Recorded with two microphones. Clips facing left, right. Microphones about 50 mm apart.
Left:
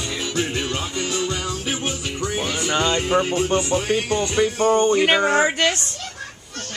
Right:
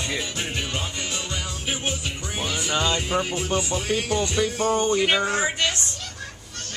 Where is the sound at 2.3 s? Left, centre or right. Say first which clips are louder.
Left 2 dB; centre.